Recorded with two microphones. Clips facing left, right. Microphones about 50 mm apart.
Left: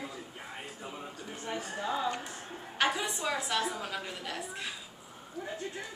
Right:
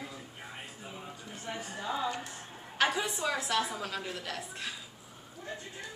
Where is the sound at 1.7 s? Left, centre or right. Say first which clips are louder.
Left 1 dB; centre.